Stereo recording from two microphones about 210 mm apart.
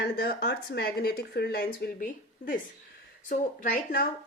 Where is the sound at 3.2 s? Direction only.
45° left (ahead or behind).